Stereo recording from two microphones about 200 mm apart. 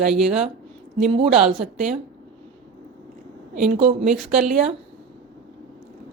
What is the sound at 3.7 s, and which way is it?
Speech, 35° right (ahead or behind).